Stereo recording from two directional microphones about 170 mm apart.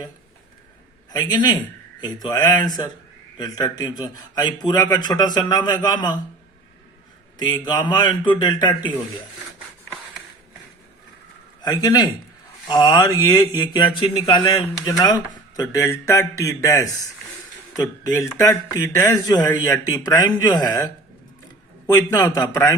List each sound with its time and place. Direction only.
1.1 s speech: 25° left (ahead or behind)
7.3 s speech: 25° left (ahead or behind)
11.6 s speech: 20° left (ahead or behind)
18.1 s speech: 20° left (ahead or behind)
22.2 s speech: 25° left (ahead or behind)